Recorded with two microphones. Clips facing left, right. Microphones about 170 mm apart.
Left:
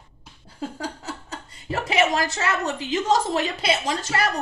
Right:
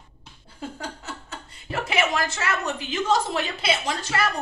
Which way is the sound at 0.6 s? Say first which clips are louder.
Left 3 dB; 35° left (ahead or behind).